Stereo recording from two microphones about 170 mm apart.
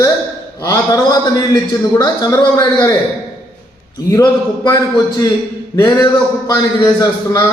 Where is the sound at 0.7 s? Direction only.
20° left (ahead or behind).